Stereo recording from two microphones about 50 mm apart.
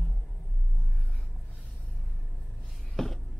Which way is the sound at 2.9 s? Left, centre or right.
Centre.